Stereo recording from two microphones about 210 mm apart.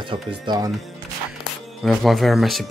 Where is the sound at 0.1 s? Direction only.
20° right (ahead or behind).